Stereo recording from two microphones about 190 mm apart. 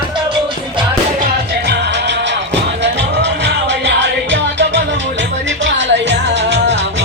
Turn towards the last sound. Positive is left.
turn(degrees=-65)  # may be behind; listen again after turning